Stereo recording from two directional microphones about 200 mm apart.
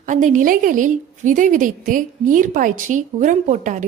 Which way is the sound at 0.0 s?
40° right (ahead or behind).